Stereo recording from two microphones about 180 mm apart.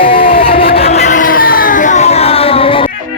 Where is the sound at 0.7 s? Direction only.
35° left (ahead or behind).